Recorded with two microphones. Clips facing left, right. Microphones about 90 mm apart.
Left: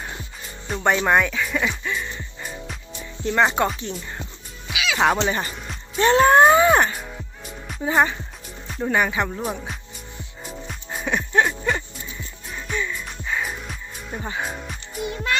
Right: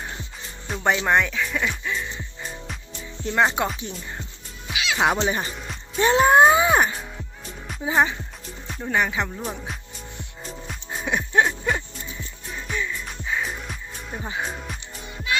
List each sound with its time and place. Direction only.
0.7 s speech: centre (ahead or behind)
3.2 s speech: centre (ahead or behind)
5.2 s speech: 5° right (ahead or behind)
6.0 s music: 10° right (ahead or behind)
7.7 s speech: centre (ahead or behind)
10.4 s music: centre (ahead or behind)
15.1 s music: 55° left (ahead or behind)